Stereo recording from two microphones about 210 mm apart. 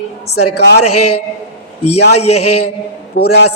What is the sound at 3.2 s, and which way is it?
Mantra, 45° left (ahead or behind).